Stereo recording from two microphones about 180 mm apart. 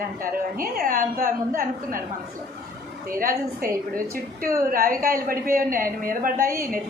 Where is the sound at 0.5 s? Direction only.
55° right (ahead or behind).